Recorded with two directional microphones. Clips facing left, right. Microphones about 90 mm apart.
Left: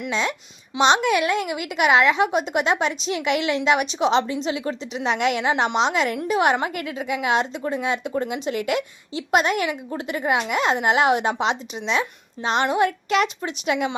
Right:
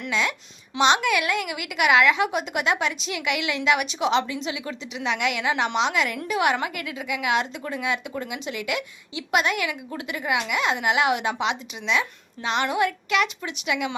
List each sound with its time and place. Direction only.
0.1 s a child's voice: 30° left (ahead or behind)